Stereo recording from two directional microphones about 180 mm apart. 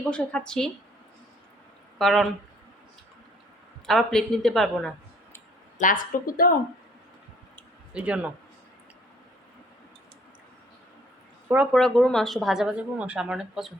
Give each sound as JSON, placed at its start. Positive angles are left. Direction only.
{"t": 0.0, "sound": "speech", "side_deg": 5}
{"t": 2.0, "sound": "speech", "side_deg": 0}
{"t": 3.8, "sound": "speech", "side_deg": 0}
{"t": 5.7, "sound": "speech", "side_deg": 45}
{"t": 7.9, "sound": "a man's voice", "side_deg": -5}
{"t": 11.4, "sound": "speech", "side_deg": -5}